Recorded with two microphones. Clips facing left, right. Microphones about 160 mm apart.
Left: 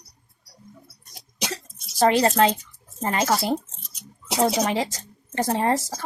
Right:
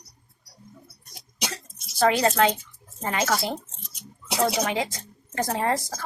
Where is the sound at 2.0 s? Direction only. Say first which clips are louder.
Left 2 dB; 35° left (ahead or behind).